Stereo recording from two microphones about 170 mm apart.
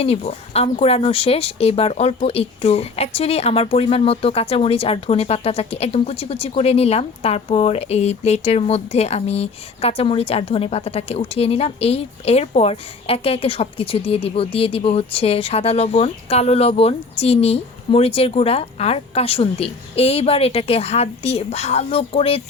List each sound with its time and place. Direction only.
0.0 s speech: 35° left (ahead or behind)